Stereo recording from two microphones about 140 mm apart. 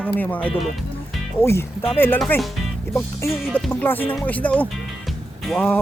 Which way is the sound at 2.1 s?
5° left (ahead or behind).